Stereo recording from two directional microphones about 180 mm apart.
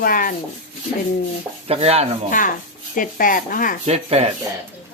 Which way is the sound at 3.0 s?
50° left (ahead or behind).